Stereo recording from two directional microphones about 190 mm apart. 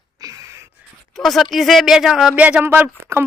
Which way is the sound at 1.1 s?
Centre (ahead or behind).